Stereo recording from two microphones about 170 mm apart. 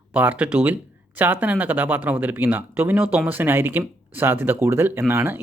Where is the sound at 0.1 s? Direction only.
10° right (ahead or behind).